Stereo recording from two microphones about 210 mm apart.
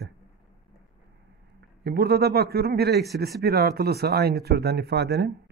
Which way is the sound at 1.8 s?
50° right (ahead or behind).